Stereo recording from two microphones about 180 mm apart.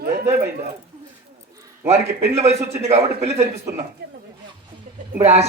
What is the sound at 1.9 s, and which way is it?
A man's voice, 35° right (ahead or behind).